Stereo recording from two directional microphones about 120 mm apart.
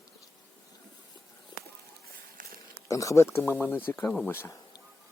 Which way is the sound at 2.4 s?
90° right.